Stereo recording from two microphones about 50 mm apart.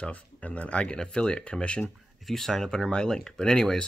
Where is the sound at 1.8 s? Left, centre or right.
Centre.